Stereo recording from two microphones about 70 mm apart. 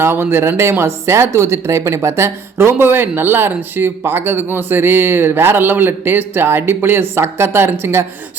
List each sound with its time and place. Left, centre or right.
0.0 s speech: right